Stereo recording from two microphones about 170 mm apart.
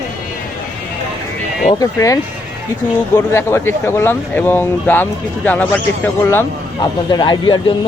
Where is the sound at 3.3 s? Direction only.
15° left (ahead or behind).